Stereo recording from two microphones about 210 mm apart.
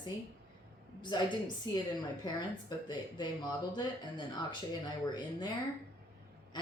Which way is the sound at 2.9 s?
20° left (ahead or behind).